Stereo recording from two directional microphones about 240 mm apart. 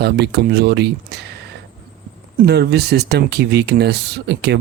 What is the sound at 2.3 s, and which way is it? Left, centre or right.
Speech, right.